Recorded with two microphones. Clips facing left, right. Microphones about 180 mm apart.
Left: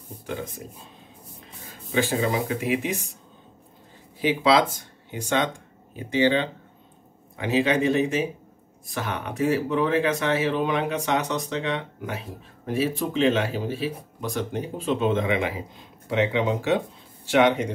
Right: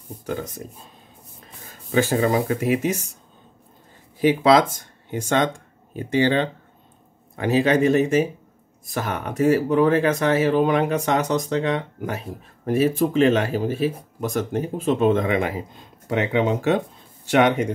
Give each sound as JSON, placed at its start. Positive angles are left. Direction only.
{"t": 1.9, "sound": "speech", "side_deg": -45}
{"t": 4.2, "sound": "speech", "side_deg": -50}